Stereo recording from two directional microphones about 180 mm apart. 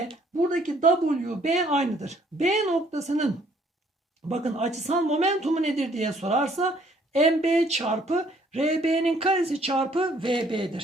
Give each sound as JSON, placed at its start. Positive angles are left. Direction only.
{"t": 0.5, "sound": "speech", "side_deg": -45}
{"t": 4.3, "sound": "speech", "side_deg": -35}